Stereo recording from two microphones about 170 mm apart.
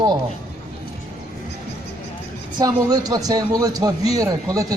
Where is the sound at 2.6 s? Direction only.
20° right (ahead or behind).